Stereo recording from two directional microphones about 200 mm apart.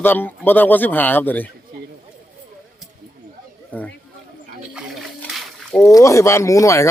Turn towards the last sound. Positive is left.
turn(degrees=15)  # may be behind; listen again after turning